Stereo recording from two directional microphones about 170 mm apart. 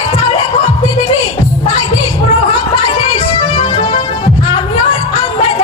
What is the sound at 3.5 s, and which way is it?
Music, 40° left (ahead or behind).